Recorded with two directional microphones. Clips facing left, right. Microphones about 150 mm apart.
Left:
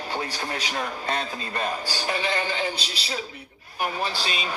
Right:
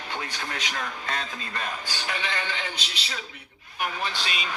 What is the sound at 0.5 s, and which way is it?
Speech, 35° left (ahead or behind).